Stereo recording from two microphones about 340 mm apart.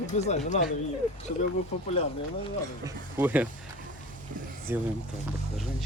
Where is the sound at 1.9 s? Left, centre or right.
Centre.